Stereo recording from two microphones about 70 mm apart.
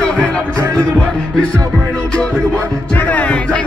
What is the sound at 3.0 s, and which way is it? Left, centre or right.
Music, left.